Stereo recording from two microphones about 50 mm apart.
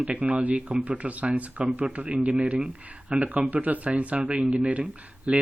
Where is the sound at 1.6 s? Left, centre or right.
Centre.